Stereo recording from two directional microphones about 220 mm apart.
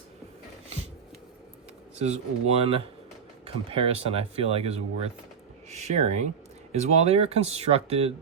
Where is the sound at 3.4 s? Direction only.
25° right (ahead or behind).